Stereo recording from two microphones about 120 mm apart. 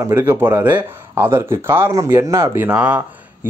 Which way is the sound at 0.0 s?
20° right (ahead or behind).